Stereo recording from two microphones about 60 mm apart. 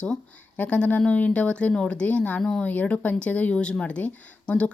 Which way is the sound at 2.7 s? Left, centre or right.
Left.